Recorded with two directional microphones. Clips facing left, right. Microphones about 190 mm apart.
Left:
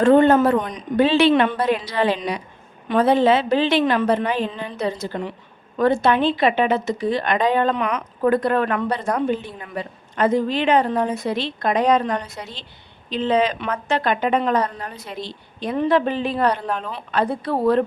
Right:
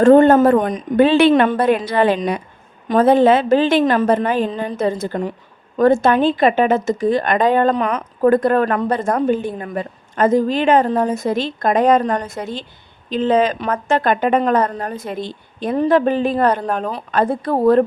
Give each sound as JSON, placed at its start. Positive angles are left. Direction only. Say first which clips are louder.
{"t": 0.0, "sound": "a woman's voice", "louder": "right 4 dB", "side_deg": -45}